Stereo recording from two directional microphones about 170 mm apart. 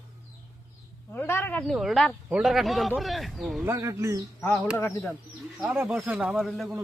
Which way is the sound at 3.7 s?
15° right (ahead or behind).